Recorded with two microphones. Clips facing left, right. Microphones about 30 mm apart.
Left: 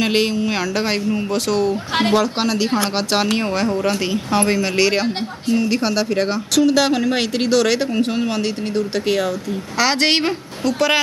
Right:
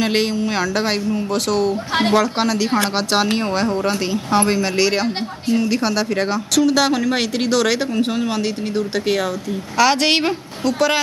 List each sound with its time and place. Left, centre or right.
0.0 s a woman's voice: centre
9.8 s a woman's voice: centre